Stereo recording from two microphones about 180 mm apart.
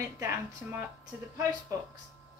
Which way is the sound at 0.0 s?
15° right (ahead or behind).